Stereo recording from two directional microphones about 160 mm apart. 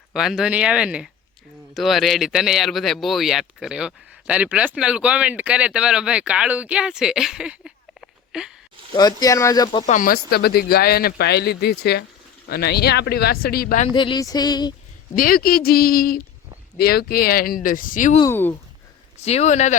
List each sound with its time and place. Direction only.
0.1 s a man's voice: centre (ahead or behind)
8.9 s speech: 25° left (ahead or behind)
9.8 s speech: 55° left (ahead or behind); by 13.7 s 70° left (ahead or behind)
13.9 s speech: 30° left (ahead or behind)
15.1 s speech: 65° left (ahead or behind)
18.3 s speech: 15° left (ahead or behind)
19.2 s speech: 45° left (ahead or behind)